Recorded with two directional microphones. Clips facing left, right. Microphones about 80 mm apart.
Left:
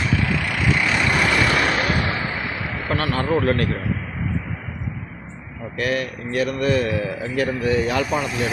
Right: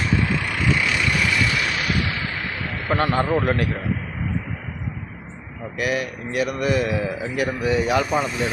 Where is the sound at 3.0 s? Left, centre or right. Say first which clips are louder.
Right 4 dB; right.